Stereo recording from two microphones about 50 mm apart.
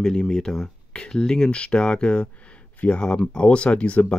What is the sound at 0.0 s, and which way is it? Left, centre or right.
Speech, centre.